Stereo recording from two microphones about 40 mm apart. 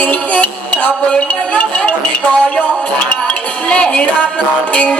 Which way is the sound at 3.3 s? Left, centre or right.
Left.